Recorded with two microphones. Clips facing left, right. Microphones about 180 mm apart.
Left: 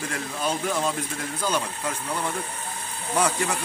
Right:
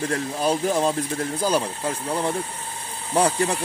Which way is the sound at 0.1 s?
35° right (ahead or behind).